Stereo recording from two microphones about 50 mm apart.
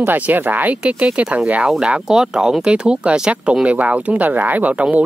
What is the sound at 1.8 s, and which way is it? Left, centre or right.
Speech, centre.